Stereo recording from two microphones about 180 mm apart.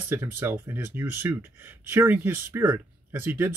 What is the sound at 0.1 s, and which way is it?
Speech, 10° right (ahead or behind).